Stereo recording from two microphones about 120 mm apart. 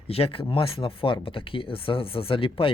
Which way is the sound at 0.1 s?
50° left (ahead or behind).